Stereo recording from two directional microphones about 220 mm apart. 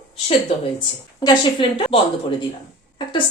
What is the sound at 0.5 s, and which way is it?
A woman's voice, 25° left (ahead or behind).